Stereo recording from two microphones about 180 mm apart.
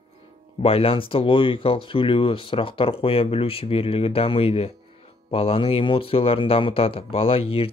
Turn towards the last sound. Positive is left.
turn(degrees=30)  # may be behind; listen again after turning